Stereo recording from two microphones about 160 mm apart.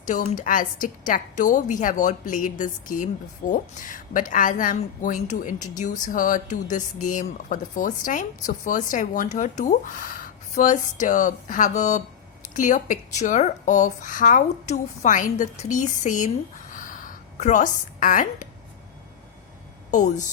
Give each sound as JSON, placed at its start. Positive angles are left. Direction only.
{"t": 0.0, "sound": "a woman's voice", "side_deg": 55}
{"t": 16.7, "sound": "a sound", "side_deg": 55}
{"t": 19.9, "sound": "speech", "side_deg": 50}